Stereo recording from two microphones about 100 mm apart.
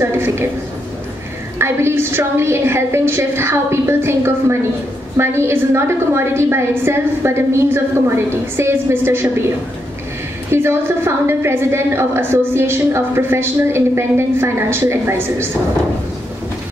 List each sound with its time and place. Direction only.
0.0 s a woman's voice: 20° right (ahead or behind)
1.6 s a woman's voice: 25° right (ahead or behind)
10.5 s a woman's voice: 25° right (ahead or behind)